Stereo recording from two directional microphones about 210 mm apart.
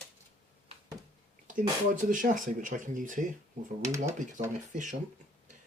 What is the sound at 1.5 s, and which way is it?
Speech, 40° right (ahead or behind).